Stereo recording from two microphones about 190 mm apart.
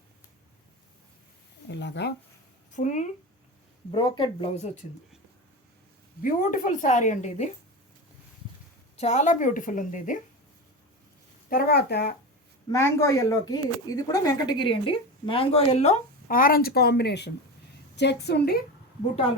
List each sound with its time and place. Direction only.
1.6 s a woman's voice: 65° left (ahead or behind)
2.7 s a woman's voice: 40° left (ahead or behind)
3.9 s speech: 25° left (ahead or behind)
6.2 s a woman's voice: 45° left (ahead or behind)
9.0 s a woman's voice: 40° left (ahead or behind)
11.4 s a woman's voice: 55° left (ahead or behind)
12.7 s a woman's voice: 15° left (ahead or behind); by 18.6 s 60° left (ahead or behind)